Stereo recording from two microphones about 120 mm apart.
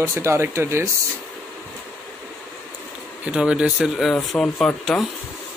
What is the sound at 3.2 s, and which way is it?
Speech, 10° right (ahead or behind).